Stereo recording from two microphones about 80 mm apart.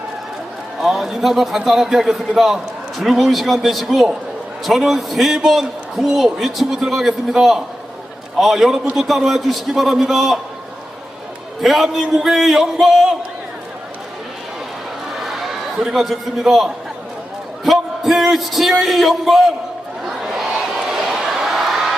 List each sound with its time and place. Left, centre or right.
0.8 s a man's voice: centre
11.6 s a man's voice: centre
15.2 s a man's voice: centre
20.1 s a sound: centre